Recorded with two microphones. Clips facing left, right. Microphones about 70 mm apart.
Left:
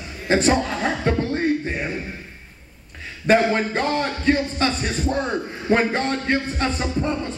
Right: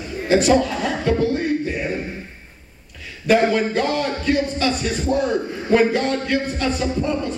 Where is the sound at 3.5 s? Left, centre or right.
Left.